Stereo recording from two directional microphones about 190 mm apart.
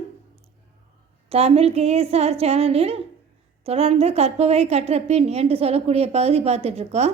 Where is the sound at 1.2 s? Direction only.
30° right (ahead or behind).